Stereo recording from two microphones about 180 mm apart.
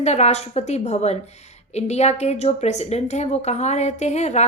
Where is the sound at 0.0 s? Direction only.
35° left (ahead or behind).